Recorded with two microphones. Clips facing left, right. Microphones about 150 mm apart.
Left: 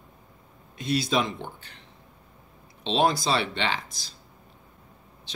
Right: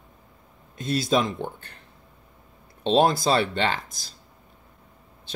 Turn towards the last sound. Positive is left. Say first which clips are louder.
# right 3 dB
turn(degrees=-50)  # may be behind; listen again after turning